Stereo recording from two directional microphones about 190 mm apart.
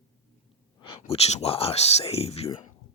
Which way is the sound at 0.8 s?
30° left (ahead or behind).